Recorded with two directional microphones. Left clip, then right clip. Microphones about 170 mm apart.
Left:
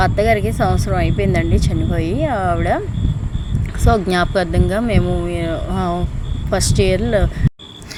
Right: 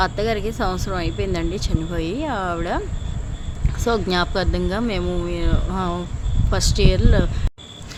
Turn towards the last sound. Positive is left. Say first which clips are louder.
# left 5 dB
turn(degrees=15)  # may be behind; listen again after turning